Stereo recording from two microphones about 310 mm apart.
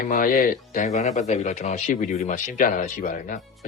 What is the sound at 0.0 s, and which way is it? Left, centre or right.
Speech, left.